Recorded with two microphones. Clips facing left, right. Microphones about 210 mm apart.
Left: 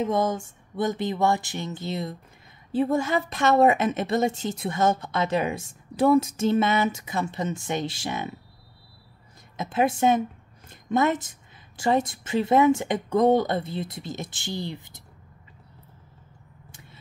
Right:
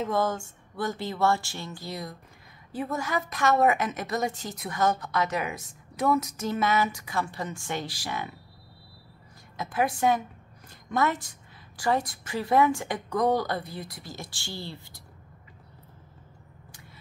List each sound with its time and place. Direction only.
0.0 s a woman's voice: 20° left (ahead or behind)
9.6 s a woman's voice: 25° left (ahead or behind)